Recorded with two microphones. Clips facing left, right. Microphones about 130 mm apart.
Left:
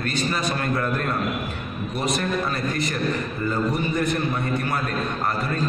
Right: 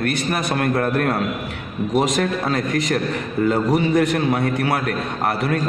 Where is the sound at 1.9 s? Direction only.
90° right.